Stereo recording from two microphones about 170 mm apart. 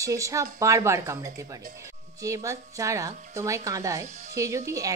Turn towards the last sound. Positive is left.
turn(degrees=-20)  # may be behind; listen again after turning